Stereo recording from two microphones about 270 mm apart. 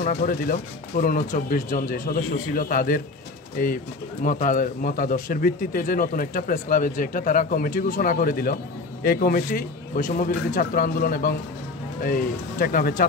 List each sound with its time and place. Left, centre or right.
0.0 s speech: left